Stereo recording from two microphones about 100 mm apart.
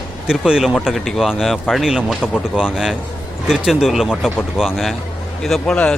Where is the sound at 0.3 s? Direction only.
5° right (ahead or behind).